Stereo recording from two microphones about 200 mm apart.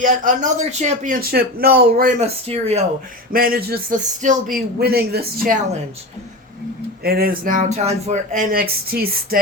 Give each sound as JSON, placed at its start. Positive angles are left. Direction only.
{"t": 0.0, "sound": "speech", "side_deg": -40}
{"t": 2.2, "sound": "speech", "side_deg": -30}
{"t": 3.3, "sound": "speech", "side_deg": -45}
{"t": 4.5, "sound": "speech", "side_deg": -50}
{"t": 7.0, "sound": "speech", "side_deg": -50}